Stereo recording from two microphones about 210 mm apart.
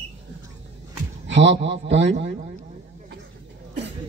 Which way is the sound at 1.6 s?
55° right (ahead or behind).